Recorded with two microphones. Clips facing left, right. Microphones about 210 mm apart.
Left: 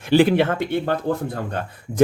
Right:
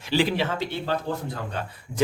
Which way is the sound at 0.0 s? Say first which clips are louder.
Left 8 dB; 55° left (ahead or behind).